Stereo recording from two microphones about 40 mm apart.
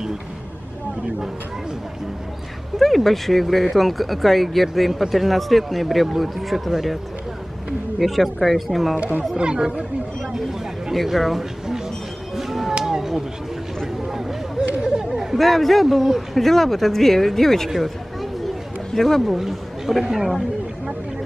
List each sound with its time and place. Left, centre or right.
2.8 s speech: centre
8.0 s speech: centre
8.9 s speech: right
9.4 s speech: right
10.9 s speech: centre
12.4 s a sound: centre
14.8 s chatter: right
15.3 s speech: centre
18.9 s speech: centre
19.3 s speech: centre